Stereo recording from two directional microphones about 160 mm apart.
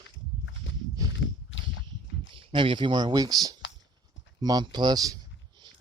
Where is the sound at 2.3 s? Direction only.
30° right (ahead or behind).